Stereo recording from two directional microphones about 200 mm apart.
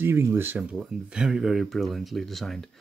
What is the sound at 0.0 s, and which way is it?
Speech, 15° right (ahead or behind).